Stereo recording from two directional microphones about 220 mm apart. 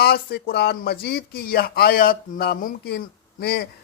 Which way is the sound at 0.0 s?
45° left (ahead or behind).